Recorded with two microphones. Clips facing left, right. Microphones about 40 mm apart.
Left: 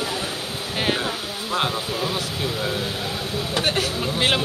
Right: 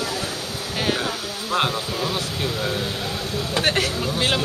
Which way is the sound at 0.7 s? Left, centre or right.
Centre.